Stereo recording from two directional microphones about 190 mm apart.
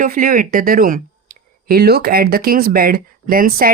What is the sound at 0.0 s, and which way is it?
Speech, 45° right (ahead or behind).